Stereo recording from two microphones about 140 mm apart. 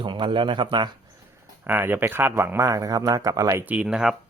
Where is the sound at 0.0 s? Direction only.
35° right (ahead or behind).